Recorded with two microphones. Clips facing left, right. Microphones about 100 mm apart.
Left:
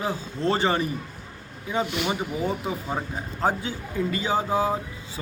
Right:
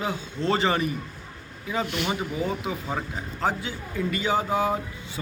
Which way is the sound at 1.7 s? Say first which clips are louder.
Left 1 dB; 20° left (ahead or behind).